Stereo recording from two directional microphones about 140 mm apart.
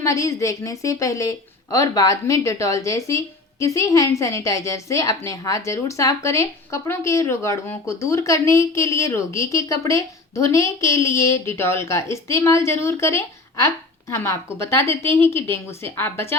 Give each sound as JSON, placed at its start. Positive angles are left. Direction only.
{"t": 0.0, "sound": "a woman's voice", "side_deg": 20}